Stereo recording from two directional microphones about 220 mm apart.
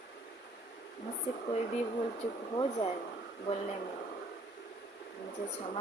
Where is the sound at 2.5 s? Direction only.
20° left (ahead or behind).